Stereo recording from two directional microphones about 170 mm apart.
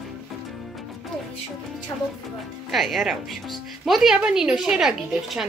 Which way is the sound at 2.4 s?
Centre (ahead or behind).